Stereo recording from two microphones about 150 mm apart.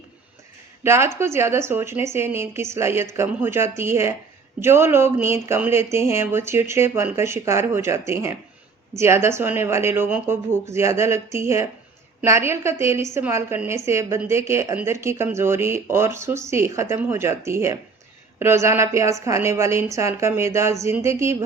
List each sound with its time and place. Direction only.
0.9 s a woman's voice: 15° right (ahead or behind)